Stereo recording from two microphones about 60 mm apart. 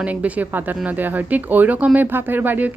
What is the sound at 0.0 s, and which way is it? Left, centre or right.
A woman's voice, right.